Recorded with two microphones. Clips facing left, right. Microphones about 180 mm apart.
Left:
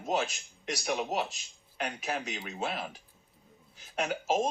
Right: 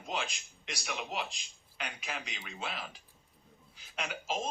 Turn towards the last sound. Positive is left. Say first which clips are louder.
# left 8 dB
turn(degrees=45)  # may be behind; listen again after turning